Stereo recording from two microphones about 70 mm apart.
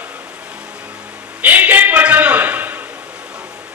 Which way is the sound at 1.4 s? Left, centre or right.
Right.